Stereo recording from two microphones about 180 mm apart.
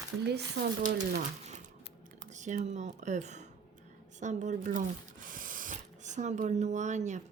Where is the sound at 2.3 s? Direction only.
45° right (ahead or behind).